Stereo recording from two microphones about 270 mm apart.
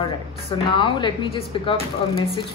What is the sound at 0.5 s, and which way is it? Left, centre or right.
A man's voice, centre.